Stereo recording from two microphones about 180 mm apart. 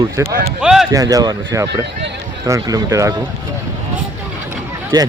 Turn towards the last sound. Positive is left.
turn(degrees=-20)  # may be behind; listen again after turning